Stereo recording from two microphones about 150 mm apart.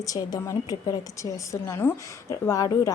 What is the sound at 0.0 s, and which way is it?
A woman's voice, 20° left (ahead or behind).